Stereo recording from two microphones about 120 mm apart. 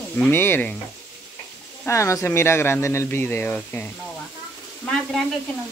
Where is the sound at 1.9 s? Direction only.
25° left (ahead or behind).